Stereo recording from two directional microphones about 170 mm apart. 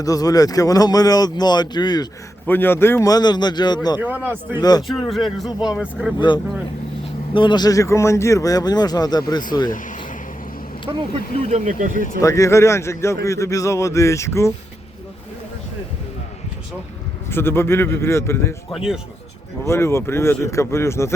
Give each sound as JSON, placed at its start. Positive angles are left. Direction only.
{"t": 0.0, "sound": "speech", "side_deg": 20}
{"t": 2.5, "sound": "speech", "side_deg": 10}
{"t": 4.0, "sound": "a man's voice", "side_deg": -10}
{"t": 4.5, "sound": "speech", "side_deg": 25}
{"t": 4.8, "sound": "speech", "side_deg": 0}
{"t": 6.1, "sound": "speech", "side_deg": 30}
{"t": 11.2, "sound": "speech", "side_deg": 60}
{"t": 11.5, "sound": "speech", "side_deg": -45}
{"t": 12.2, "sound": "speech", "side_deg": 20}
{"t": 17.2, "sound": "speech", "side_deg": 15}
{"t": 19.6, "sound": "speech", "side_deg": 15}